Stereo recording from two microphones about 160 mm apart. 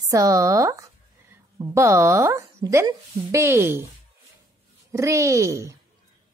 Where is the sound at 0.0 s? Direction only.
20° right (ahead or behind).